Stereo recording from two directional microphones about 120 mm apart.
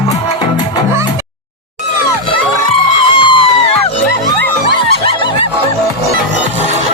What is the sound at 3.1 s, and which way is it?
Music, 45° left (ahead or behind).